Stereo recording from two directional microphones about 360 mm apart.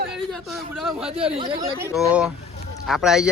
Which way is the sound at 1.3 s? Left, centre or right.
Centre.